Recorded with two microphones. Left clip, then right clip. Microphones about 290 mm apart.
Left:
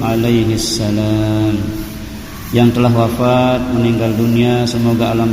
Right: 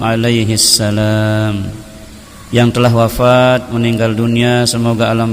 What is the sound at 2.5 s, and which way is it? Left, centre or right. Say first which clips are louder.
Speech: right 2 dB; right.